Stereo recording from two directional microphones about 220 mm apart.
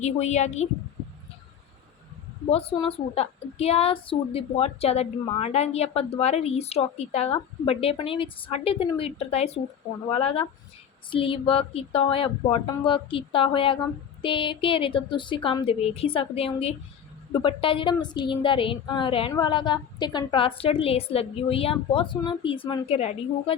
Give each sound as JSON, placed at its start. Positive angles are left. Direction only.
{"t": 0.0, "sound": "a woman's voice", "side_deg": 30}
{"t": 2.5, "sound": "a woman's voice", "side_deg": 25}